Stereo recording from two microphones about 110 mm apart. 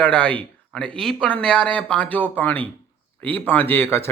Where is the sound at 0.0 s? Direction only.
10° left (ahead or behind).